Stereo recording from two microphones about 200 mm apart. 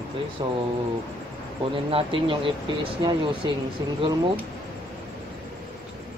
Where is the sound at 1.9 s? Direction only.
25° right (ahead or behind).